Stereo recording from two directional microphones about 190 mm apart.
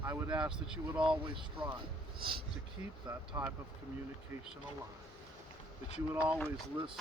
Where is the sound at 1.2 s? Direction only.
25° right (ahead or behind).